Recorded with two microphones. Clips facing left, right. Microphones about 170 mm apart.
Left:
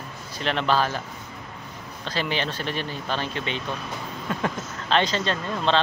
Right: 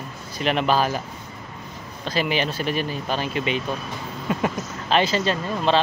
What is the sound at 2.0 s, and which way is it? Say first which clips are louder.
Speech: right 4 dB; 10° right (ahead or behind).